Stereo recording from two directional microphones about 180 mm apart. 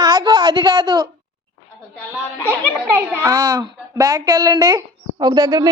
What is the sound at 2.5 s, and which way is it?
A child's voice, 15° right (ahead or behind).